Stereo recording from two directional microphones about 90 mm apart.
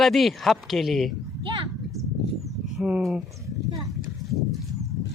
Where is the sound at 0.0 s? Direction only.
Centre (ahead or behind).